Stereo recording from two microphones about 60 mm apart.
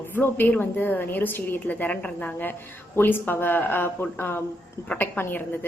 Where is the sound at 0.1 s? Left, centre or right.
Left.